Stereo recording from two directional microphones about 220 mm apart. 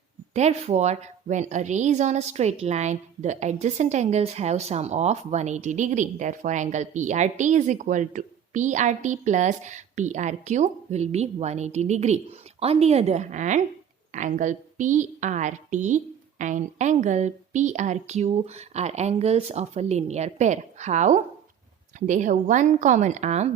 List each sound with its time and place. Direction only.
0.3 s a woman's voice: 30° right (ahead or behind)